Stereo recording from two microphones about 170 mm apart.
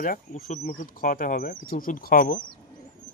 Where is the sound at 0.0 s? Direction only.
55° left (ahead or behind).